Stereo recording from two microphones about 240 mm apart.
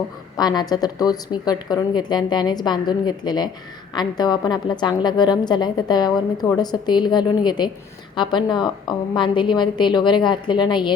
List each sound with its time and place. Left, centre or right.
0.3 s a woman's voice: centre